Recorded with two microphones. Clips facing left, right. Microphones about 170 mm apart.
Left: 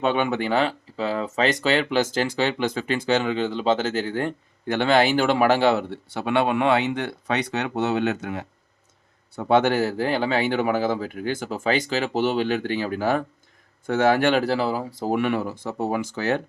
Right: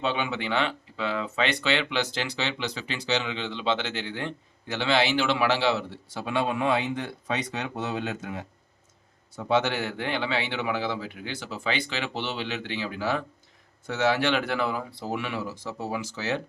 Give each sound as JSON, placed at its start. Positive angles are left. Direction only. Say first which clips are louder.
{"t": 0.0, "sound": "speech", "louder": "left 6 dB", "side_deg": 55}
{"t": 9.3, "sound": "speech", "louder": "left 6 dB", "side_deg": 55}